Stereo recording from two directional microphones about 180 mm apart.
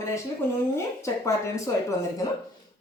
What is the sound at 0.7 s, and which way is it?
Speech, 15° left (ahead or behind).